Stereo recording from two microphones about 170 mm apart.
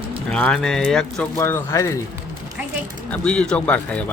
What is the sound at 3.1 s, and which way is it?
A man's voice, 5° left (ahead or behind).